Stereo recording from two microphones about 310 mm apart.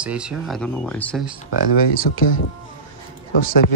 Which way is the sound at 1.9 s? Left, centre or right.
Left.